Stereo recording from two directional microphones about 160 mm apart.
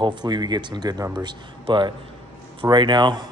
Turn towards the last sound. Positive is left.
turn(degrees=-30)  # may be behind; listen again after turning